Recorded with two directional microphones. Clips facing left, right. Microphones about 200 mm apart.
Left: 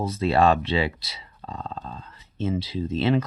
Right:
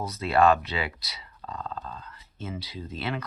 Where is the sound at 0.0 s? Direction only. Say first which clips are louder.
Left 2 dB; 30° left (ahead or behind).